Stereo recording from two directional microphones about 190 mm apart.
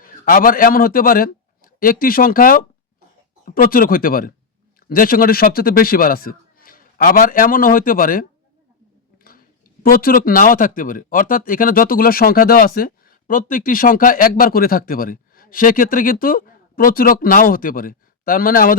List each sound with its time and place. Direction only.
0.0 s a man's voice: 45° left (ahead or behind)
9.1 s a sound: 50° left (ahead or behind)
9.8 s speech: 50° left (ahead or behind)